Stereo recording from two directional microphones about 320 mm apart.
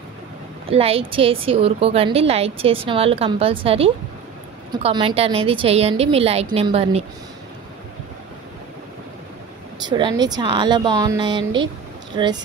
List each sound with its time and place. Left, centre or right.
0.7 s a woman's voice: centre
9.8 s a woman's voice: centre